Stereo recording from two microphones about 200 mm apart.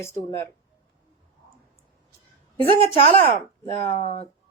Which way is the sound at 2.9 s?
30° left (ahead or behind).